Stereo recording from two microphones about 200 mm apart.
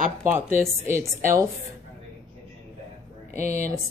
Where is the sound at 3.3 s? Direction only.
35° left (ahead or behind).